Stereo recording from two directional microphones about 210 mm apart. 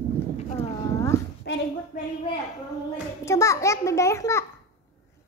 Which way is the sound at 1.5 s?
55° left (ahead or behind).